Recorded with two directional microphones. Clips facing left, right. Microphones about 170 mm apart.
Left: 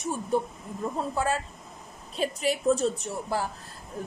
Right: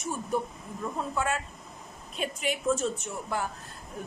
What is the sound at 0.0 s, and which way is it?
A woman's voice, 30° left (ahead or behind).